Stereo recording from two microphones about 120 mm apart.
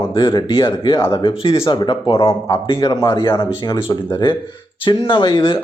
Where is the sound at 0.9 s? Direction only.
25° left (ahead or behind).